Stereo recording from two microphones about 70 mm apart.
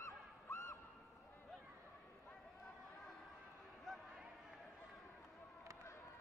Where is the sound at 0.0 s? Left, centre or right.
Left.